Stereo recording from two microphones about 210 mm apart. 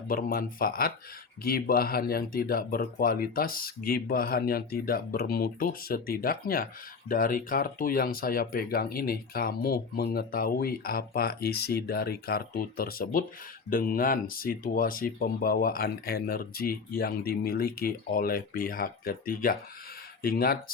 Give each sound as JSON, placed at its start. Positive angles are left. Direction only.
{"t": 0.1, "sound": "speech", "side_deg": 45}